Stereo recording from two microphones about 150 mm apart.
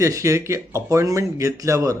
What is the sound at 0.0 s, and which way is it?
A man's voice, 20° right (ahead or behind).